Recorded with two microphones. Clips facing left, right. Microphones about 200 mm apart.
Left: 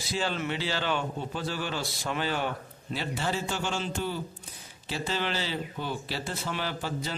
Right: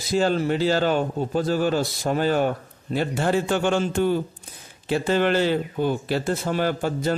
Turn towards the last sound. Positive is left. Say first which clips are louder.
# right 10 dB
turn(degrees=-50)  # may be behind; listen again after turning